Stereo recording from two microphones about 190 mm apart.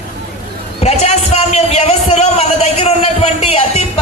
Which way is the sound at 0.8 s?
35° left (ahead or behind).